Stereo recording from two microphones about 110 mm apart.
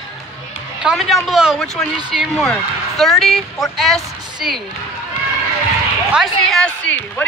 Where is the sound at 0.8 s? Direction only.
5° right (ahead or behind).